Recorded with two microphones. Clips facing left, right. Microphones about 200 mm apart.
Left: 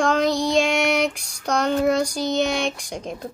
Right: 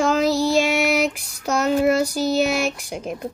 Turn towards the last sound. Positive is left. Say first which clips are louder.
# right 2 dB
turn(degrees=-5)  # may be behind; listen again after turning